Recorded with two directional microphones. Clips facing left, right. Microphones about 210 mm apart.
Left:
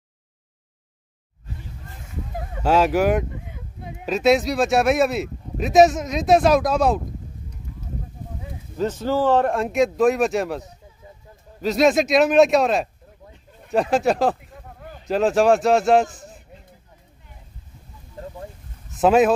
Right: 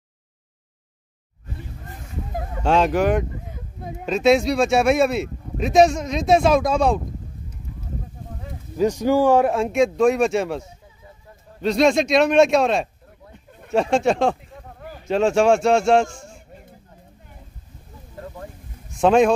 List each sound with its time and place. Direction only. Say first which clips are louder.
1.9 s a sound: right 2 dB; 50° right (ahead or behind)
2.6 s speech: even; 5° left (ahead or behind)
3.4 s a sound: right 3 dB; 40° right (ahead or behind)
4.0 s speech: right 1 dB; centre (ahead or behind)
8.7 s speech: right 4 dB; 10° right (ahead or behind)
11.6 s speech: even; centre (ahead or behind)
18.9 s speech: even; 5° left (ahead or behind)